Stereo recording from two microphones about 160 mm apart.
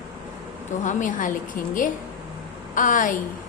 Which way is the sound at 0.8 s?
50° left (ahead or behind).